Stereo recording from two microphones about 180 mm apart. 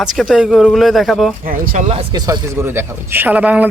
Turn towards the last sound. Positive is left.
turn(degrees=-10)  # may be behind; listen again after turning